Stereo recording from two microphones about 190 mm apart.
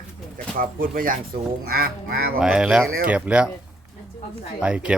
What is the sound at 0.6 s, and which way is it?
Speech, 45° right (ahead or behind).